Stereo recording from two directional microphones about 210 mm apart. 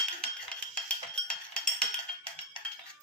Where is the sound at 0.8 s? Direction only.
5° left (ahead or behind).